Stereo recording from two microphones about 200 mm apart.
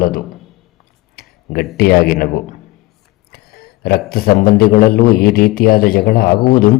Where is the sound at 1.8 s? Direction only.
50° left (ahead or behind).